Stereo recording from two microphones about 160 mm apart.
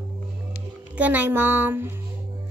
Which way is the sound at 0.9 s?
10° right (ahead or behind).